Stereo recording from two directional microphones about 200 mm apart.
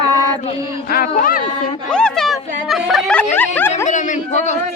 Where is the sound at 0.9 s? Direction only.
45° left (ahead or behind).